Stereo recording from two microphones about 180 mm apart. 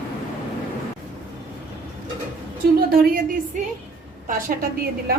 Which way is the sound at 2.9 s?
55° right (ahead or behind).